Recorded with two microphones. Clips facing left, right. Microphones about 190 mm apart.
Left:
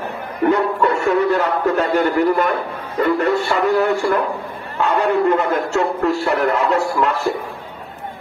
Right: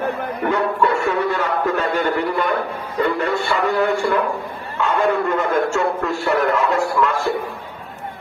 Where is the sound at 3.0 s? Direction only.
40° left (ahead or behind).